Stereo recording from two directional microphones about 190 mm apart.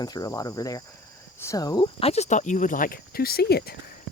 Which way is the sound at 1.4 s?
15° left (ahead or behind).